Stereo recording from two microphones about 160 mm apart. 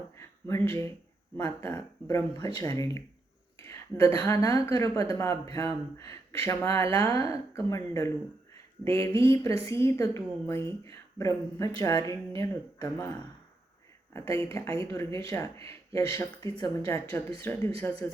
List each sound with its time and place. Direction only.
0.2 s a sound: 15° left (ahead or behind)
1.4 s speech: 20° left (ahead or behind)
14.1 s speech: 15° left (ahead or behind)